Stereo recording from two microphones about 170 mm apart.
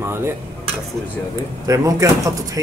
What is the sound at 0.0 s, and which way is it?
Dishes, 15° right (ahead or behind).